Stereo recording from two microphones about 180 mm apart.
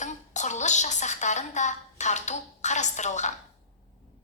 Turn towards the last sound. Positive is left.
turn(degrees=40)  # may be behind; listen again after turning